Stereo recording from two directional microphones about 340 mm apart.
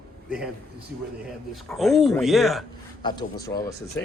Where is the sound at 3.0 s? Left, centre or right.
Centre.